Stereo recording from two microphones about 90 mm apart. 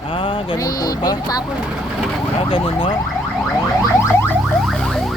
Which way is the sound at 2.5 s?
80° left.